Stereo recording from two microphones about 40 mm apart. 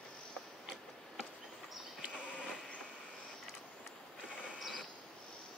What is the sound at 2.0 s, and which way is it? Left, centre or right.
Sheep, right.